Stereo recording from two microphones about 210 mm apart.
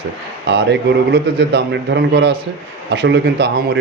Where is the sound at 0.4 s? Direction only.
55° right (ahead or behind).